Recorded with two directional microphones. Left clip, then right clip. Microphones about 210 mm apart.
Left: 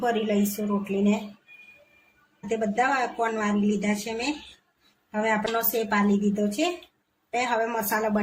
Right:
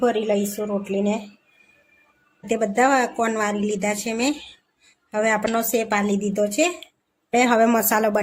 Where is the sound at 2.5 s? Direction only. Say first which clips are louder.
Right 6 dB; 55° right (ahead or behind).